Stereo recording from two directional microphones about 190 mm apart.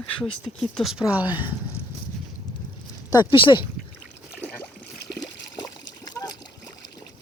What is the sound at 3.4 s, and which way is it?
Speech, 25° left (ahead or behind).